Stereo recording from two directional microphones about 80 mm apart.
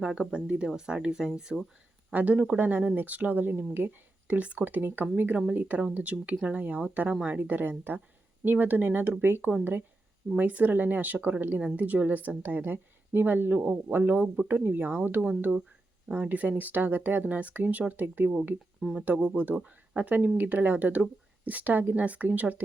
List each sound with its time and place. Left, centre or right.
0.0 s speech: centre